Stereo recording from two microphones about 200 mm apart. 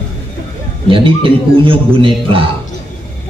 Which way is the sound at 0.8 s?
25° right (ahead or behind).